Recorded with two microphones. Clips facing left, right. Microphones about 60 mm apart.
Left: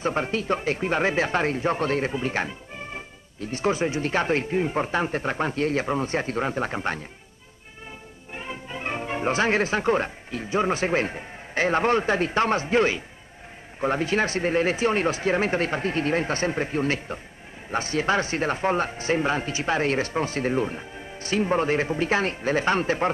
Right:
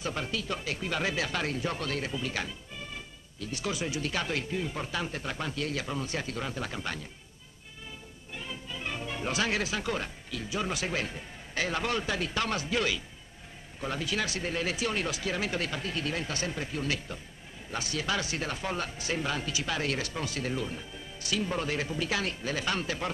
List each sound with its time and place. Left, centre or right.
0.0 s speech: left
8.3 s speech: left